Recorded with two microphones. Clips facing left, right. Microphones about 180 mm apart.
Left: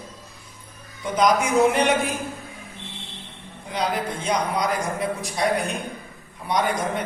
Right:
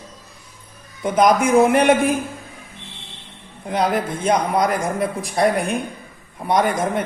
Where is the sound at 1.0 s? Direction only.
55° right (ahead or behind).